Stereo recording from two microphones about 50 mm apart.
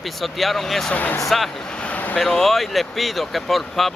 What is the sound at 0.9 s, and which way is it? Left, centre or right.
Speech, left.